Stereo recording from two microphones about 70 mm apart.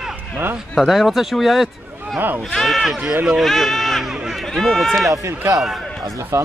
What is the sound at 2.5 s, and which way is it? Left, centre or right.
Speech, centre.